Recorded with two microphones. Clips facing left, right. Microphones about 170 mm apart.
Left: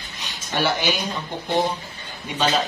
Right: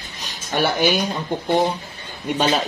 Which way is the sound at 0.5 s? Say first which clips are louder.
Right 4 dB; 55° right (ahead or behind).